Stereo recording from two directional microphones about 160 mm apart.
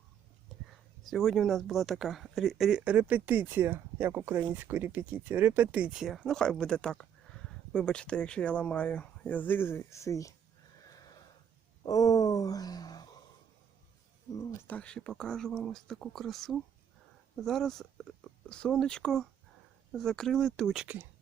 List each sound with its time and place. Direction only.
1.0 s speech: centre (ahead or behind); by 10.3 s 20° left (ahead or behind)
10.8 s a sound: 25° left (ahead or behind)
14.3 s speech: 10° left (ahead or behind)
20.8 s speech: 10° right (ahead or behind)